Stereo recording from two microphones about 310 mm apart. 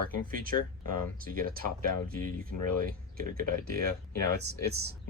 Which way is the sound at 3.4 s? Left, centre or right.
Right.